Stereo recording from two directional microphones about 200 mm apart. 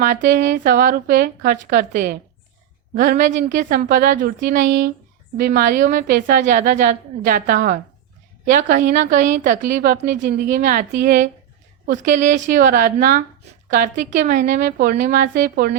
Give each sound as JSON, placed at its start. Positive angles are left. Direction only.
{"t": 0.0, "sound": "a woman's voice", "side_deg": -40}